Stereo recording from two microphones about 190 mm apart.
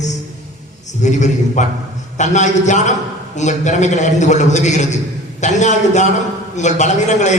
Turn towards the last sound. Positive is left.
turn(degrees=40)  # may be behind; listen again after turning